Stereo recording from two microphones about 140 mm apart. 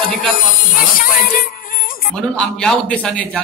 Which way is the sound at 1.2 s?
85° left.